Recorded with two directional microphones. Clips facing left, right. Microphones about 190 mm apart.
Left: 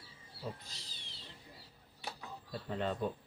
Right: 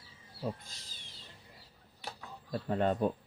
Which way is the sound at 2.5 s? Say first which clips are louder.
Right 7 dB; 50° right (ahead or behind).